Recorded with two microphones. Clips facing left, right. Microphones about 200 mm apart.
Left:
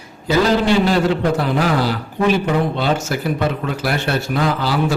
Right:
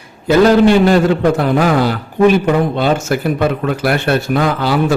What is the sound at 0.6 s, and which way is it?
Speech, 55° right (ahead or behind).